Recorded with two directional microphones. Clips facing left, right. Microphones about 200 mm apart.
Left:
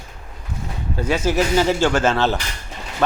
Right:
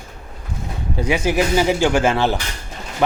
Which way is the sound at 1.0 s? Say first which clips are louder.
Right 1 dB; 15° right (ahead or behind).